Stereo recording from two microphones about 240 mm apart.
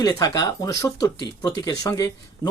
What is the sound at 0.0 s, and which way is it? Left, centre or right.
Speech, centre.